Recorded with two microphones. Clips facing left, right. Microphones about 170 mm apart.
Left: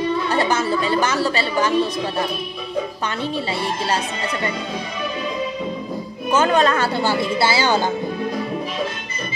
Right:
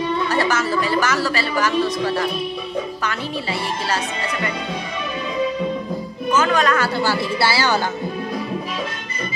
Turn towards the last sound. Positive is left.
turn(degrees=20)  # may be behind; listen again after turning